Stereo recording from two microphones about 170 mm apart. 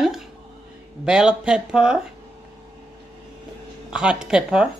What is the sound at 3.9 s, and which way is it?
Speech, 5° right (ahead or behind).